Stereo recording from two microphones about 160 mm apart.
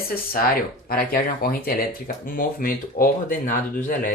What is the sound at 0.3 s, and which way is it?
Speech, 65° left (ahead or behind).